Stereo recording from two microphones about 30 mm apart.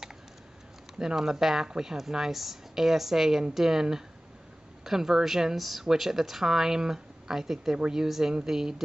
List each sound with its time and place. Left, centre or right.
0.9 s speech: centre
4.8 s speech: centre
7.7 s speech: right
8.0 s speech: centre